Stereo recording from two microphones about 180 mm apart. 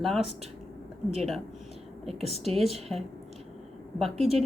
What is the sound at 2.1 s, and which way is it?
Speech, centre (ahead or behind).